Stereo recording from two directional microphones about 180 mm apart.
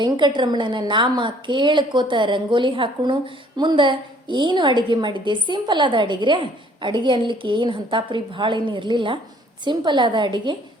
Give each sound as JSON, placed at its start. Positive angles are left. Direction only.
{"t": 0.0, "sound": "a woman's voice", "side_deg": -25}